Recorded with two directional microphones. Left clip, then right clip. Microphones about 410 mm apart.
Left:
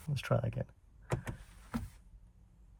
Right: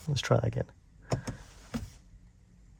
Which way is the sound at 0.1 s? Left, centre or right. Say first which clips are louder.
Right 7 dB; right.